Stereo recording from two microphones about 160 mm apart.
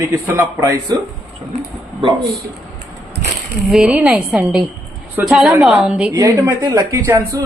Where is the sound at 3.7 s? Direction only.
5° right (ahead or behind).